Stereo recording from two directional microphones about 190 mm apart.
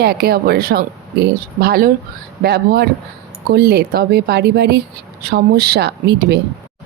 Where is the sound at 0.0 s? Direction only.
55° right (ahead or behind).